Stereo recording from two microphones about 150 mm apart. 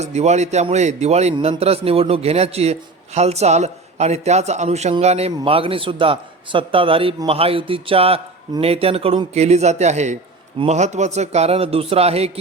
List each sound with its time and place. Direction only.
0.0 s a man's voice: 45° right (ahead or behind)